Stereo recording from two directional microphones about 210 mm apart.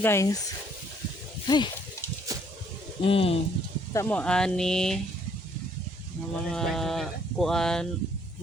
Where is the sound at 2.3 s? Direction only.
15° right (ahead or behind).